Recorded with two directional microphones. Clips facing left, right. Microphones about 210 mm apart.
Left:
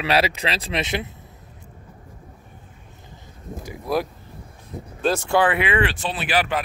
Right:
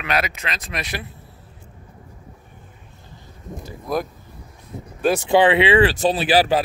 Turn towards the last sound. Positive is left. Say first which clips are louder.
# right 6 dB
turn(degrees=-35)  # may be behind; listen again after turning